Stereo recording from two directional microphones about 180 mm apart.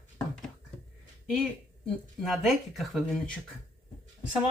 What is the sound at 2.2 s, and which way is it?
Speech, centre (ahead or behind).